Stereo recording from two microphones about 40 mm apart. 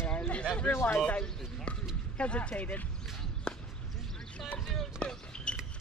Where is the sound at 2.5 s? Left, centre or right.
Left.